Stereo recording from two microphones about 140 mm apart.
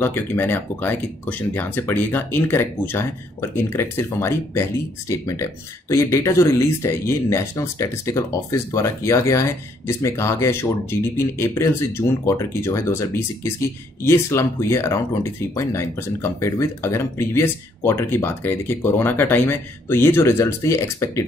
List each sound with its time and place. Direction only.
0.0 s speech: 15° left (ahead or behind)